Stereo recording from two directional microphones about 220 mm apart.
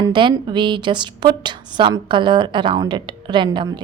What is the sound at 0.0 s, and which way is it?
A woman's voice, 20° right (ahead or behind).